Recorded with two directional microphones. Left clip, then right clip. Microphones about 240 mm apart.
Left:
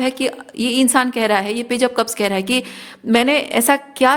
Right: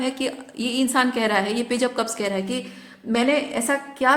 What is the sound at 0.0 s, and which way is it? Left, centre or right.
A woman's voice, left.